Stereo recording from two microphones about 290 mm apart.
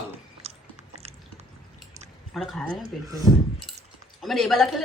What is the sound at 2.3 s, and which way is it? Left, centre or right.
Speech, centre.